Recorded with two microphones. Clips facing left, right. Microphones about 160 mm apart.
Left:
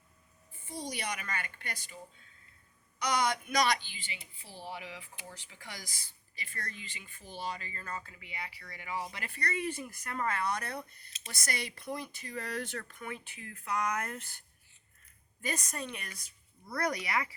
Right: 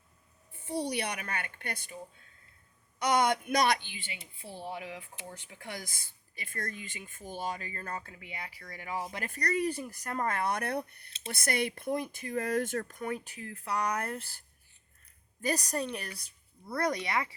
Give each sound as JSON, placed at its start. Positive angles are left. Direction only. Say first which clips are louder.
{"t": 0.6, "sound": "a woman's voice", "louder": "right 7 dB", "side_deg": -65}
{"t": 3.0, "sound": "a woman's voice", "louder": "right 4 dB", "side_deg": -55}
{"t": 5.3, "sound": "speech", "louder": "right 7 dB", "side_deg": -55}